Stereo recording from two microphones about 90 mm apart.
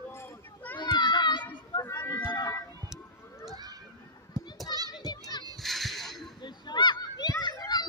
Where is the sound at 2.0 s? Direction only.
55° left (ahead or behind).